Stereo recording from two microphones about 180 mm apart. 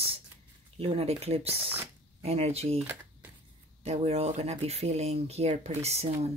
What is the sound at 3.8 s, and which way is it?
Speech, 35° right (ahead or behind).